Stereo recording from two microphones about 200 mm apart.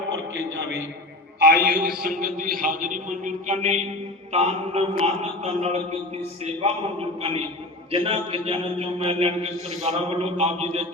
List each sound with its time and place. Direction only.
1.4 s a man's voice: 50° right (ahead or behind); by 10.8 s 30° right (ahead or behind)